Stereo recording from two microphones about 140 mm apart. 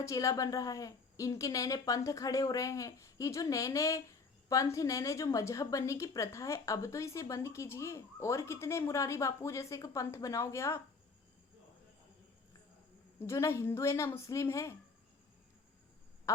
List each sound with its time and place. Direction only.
0.0 s a woman's voice: 20° left (ahead or behind)
13.1 s a woman's voice: 20° left (ahead or behind)